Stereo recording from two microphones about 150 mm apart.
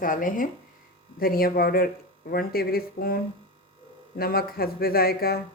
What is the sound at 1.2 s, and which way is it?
Speech, 75° left (ahead or behind).